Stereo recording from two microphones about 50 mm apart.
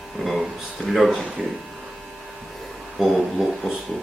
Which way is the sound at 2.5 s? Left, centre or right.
Centre.